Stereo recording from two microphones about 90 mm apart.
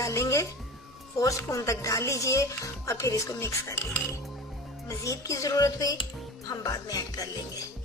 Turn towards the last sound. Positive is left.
turn(degrees=45)  # may be behind; listen again after turning